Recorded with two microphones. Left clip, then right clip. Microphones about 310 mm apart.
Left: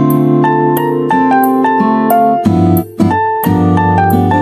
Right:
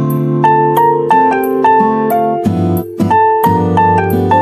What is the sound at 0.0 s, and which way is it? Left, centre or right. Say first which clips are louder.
Music: left 2 dB; centre.